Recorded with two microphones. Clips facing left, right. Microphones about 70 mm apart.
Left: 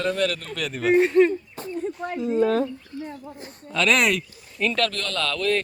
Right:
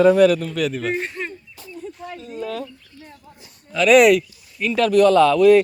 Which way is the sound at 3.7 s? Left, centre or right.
Centre.